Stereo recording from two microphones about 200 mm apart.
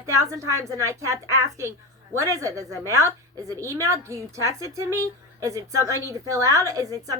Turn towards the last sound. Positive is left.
turn(degrees=-15)  # may be behind; listen again after turning